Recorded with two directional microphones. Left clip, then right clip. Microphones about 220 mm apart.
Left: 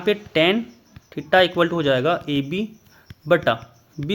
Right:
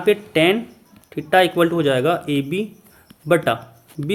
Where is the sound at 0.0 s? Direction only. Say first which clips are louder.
Right 2 dB; 30° left (ahead or behind).